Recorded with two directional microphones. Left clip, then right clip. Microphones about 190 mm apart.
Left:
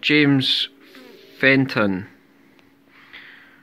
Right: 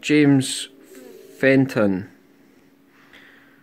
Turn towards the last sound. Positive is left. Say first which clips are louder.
# left 6 dB
turn(degrees=0)  # may be behind; listen again after turning